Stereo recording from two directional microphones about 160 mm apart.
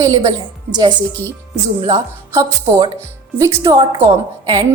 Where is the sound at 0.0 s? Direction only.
25° right (ahead or behind).